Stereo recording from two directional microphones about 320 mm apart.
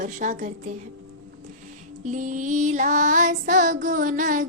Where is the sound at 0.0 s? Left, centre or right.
Right.